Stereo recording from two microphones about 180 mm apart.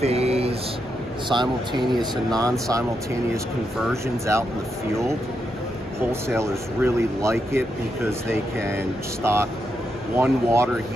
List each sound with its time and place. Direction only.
0.0 s a sound: 35° right (ahead or behind)
1.3 s speech: 25° right (ahead or behind)
3.9 s speech: 15° right (ahead or behind)
5.9 s speech: 15° right (ahead or behind)